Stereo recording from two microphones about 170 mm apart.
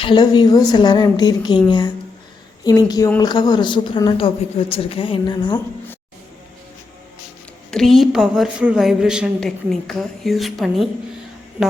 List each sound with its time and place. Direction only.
0.0 s a woman's voice: 25° left (ahead or behind)
7.7 s a woman's voice: centre (ahead or behind)